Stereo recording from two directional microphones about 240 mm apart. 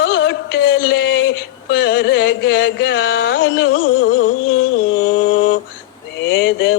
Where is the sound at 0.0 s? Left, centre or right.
Left.